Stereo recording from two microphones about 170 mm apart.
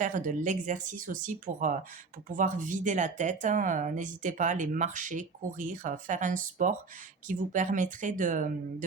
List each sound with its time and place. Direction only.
0.0 s speech: 50° right (ahead or behind)